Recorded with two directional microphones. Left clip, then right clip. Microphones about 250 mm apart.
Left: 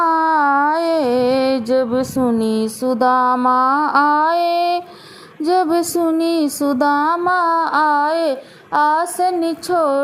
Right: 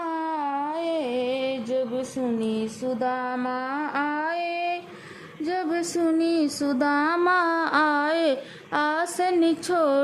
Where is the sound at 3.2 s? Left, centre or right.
Centre.